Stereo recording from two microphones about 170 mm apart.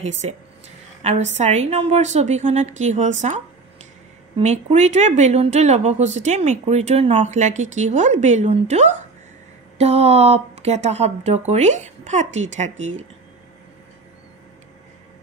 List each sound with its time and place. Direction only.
0.0 s a woman's voice: 40° right (ahead or behind)
4.4 s a woman's voice: 40° right (ahead or behind)